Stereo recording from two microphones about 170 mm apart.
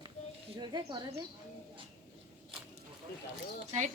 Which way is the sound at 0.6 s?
25° right (ahead or behind).